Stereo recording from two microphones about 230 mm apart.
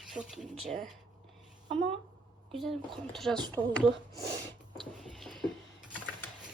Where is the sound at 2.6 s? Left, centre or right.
Centre.